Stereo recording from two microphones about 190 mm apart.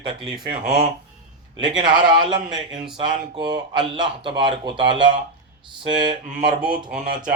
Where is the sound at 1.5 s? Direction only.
25° right (ahead or behind).